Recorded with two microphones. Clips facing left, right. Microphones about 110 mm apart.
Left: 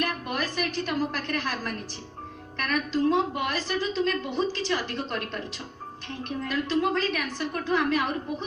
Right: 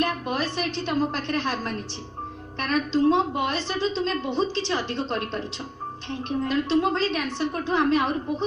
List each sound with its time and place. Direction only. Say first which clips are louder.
0.0 s a woman's voice: right 4 dB; 25° right (ahead or behind)